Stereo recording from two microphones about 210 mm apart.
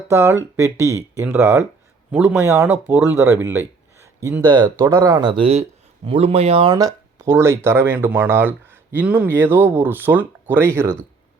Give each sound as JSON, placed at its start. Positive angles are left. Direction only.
{"t": 0.1, "sound": "speech", "side_deg": -10}